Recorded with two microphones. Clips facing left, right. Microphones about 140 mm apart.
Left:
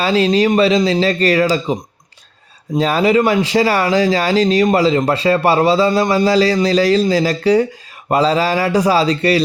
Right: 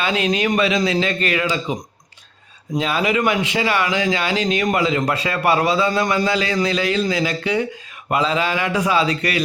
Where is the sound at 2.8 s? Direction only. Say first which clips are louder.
Left 6 dB; 40° left (ahead or behind).